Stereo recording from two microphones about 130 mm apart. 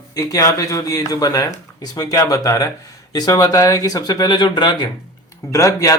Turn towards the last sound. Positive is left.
turn(degrees=25)  # may be behind; listen again after turning